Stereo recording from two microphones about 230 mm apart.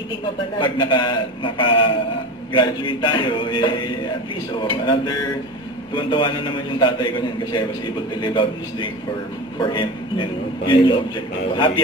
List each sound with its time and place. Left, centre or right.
0.6 s a man's voice: left